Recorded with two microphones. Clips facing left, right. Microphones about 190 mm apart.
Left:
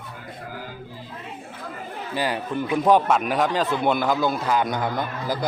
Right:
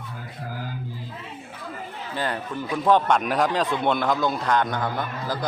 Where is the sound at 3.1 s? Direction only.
Centre (ahead or behind).